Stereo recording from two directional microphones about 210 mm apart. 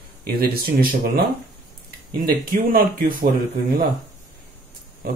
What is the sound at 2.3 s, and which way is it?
Speech, 45° right (ahead or behind).